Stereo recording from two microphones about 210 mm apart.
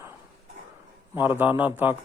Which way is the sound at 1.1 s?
10° right (ahead or behind).